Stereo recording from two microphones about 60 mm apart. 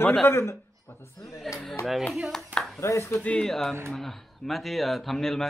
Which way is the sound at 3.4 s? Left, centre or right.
Centre.